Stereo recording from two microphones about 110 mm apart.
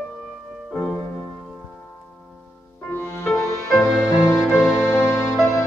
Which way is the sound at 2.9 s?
25° left (ahead or behind).